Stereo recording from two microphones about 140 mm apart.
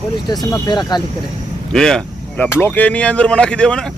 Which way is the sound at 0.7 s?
30° left (ahead or behind).